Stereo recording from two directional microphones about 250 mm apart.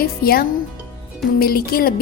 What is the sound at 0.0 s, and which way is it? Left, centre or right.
A woman's voice, left.